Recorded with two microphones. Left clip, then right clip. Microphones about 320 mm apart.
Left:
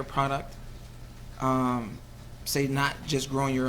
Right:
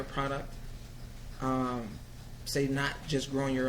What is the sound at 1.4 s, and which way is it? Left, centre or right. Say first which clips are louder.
Speech: left 6 dB; left.